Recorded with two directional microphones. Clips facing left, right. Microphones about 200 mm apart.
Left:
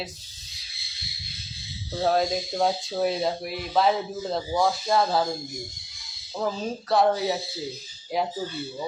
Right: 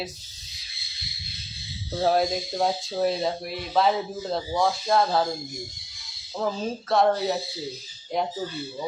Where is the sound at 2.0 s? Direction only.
5° right (ahead or behind).